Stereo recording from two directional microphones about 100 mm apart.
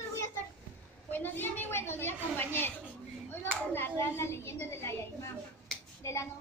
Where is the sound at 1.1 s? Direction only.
20° left (ahead or behind).